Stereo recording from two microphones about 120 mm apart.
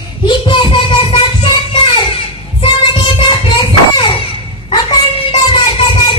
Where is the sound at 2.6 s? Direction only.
40° left (ahead or behind).